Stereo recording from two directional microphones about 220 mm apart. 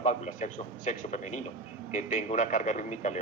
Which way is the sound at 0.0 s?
35° left (ahead or behind).